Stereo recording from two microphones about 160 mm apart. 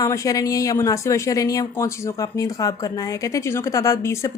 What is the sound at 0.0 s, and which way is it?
Speech, 20° left (ahead or behind).